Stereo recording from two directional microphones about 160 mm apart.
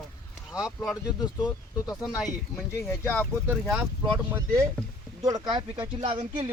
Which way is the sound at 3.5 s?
5° right (ahead or behind).